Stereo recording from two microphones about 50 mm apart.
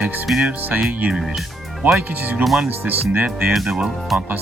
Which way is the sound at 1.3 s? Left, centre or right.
Centre.